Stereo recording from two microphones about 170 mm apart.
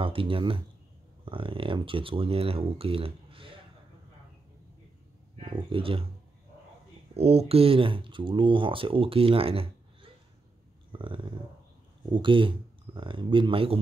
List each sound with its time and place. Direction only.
0.0 s speech: 30° right (ahead or behind)
5.4 s speech: 30° right (ahead or behind)
7.2 s speech: 35° right (ahead or behind)
10.9 s a sound: 30° right (ahead or behind)
12.1 s speech: 30° right (ahead or behind)